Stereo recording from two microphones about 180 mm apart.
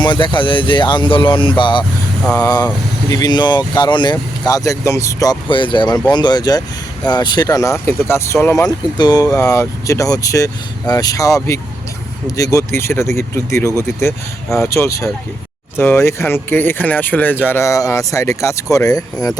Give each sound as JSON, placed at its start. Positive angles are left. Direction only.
{"t": 0.0, "sound": "speech", "side_deg": 25}